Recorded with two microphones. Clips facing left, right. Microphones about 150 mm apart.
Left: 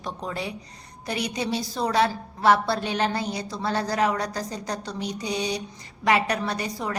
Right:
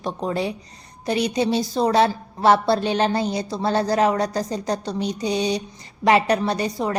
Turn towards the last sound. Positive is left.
turn(degrees=-30)  # may be behind; listen again after turning